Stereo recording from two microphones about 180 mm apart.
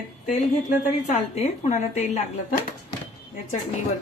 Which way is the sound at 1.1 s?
40° left (ahead or behind).